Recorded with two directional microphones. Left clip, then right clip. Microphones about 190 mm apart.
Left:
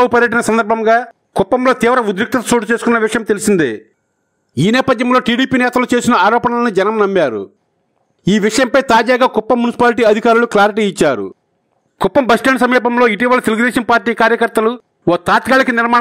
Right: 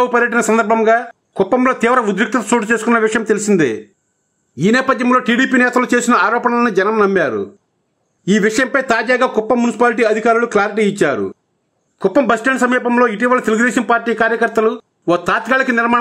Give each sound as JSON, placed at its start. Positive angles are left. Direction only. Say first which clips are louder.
{"t": 0.0, "sound": "speech", "louder": "left 2 dB", "side_deg": 30}
{"t": 4.6, "sound": "a man's voice", "louder": "left 1 dB", "side_deg": 40}